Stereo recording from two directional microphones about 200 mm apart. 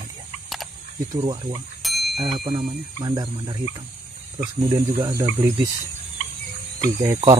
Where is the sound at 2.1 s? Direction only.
25° right (ahead or behind).